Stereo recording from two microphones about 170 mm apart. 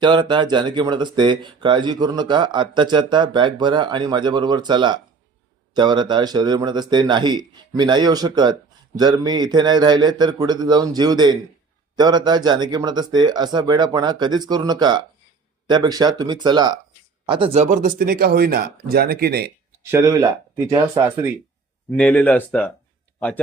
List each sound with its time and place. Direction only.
0.0 s speech: 25° right (ahead or behind); by 19.5 s 65° right (ahead or behind)
19.8 s speech: 15° right (ahead or behind)
21.8 s speech: 10° left (ahead or behind)